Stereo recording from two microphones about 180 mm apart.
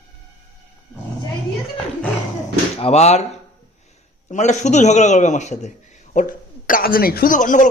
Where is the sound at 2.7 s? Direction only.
35° left (ahead or behind).